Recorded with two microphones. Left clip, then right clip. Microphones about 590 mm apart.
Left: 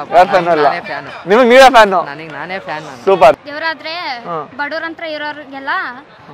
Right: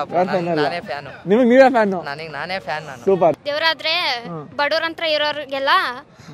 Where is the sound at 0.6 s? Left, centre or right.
Right.